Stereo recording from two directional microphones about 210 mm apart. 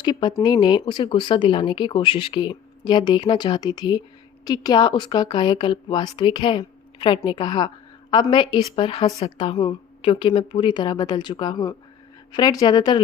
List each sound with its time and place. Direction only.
0.0 s speech: 20° left (ahead or behind)